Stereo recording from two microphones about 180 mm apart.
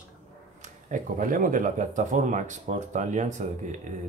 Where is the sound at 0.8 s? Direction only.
45° right (ahead or behind).